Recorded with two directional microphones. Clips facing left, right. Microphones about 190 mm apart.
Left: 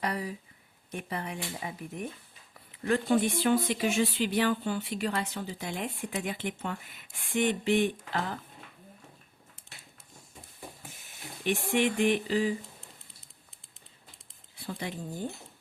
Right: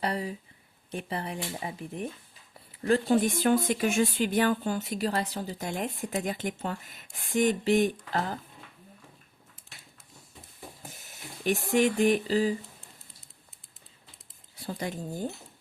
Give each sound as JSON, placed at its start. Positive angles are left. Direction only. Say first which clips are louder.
{"t": 0.0, "sound": "speech", "louder": "right 2 dB", "side_deg": -30}
{"t": 10.8, "sound": "speech", "louder": "right 1 dB", "side_deg": -40}
{"t": 14.5, "sound": "speech", "louder": "right 3 dB", "side_deg": -40}